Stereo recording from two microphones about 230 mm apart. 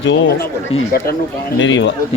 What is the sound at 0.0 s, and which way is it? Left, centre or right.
A man's voice, left.